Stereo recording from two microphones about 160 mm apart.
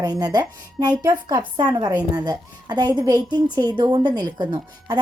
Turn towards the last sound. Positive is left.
turn(degrees=-25)  # may be behind; listen again after turning